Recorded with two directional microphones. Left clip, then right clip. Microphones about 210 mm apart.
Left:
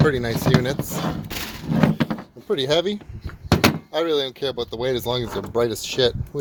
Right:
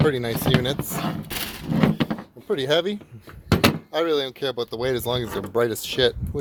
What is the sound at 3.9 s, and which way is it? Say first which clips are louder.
Speech: left 1 dB; 5° right (ahead or behind).